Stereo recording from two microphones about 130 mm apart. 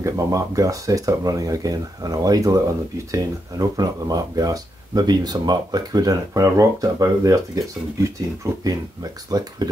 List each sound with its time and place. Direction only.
0.0 s speech: 25° right (ahead or behind)